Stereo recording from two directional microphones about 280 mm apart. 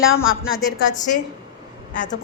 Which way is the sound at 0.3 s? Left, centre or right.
Left.